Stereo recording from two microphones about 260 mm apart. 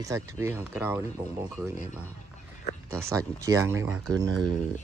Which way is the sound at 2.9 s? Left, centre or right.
Centre.